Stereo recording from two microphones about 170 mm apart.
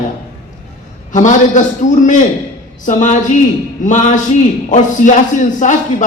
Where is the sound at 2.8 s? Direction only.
45° left (ahead or behind).